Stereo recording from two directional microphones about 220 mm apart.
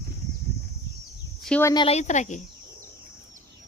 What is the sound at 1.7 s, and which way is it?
Speech, 25° left (ahead or behind).